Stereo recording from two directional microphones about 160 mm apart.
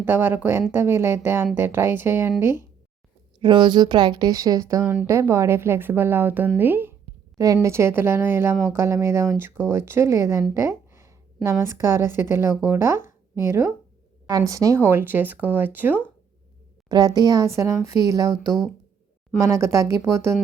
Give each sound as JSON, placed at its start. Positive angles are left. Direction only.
{"t": 0.0, "sound": "a woman's voice", "side_deg": -15}
{"t": 3.4, "sound": "a woman's voice", "side_deg": -30}
{"t": 10.5, "sound": "a sound", "side_deg": -15}
{"t": 11.4, "sound": "a woman's voice", "side_deg": -15}
{"t": 16.9, "sound": "speech", "side_deg": -25}
{"t": 19.4, "sound": "speech", "side_deg": -20}